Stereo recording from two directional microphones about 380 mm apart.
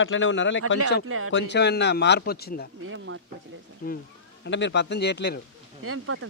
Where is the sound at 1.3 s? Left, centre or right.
Left.